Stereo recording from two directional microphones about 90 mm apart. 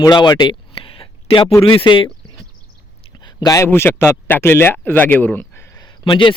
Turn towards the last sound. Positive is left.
turn(degrees=65)  # may be behind; listen again after turning